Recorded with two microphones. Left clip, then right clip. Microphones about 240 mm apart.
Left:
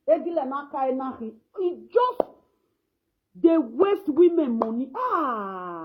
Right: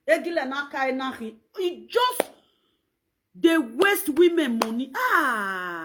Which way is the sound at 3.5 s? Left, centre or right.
Right.